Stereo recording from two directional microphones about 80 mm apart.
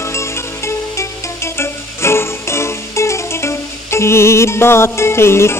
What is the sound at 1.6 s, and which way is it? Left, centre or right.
Music, left.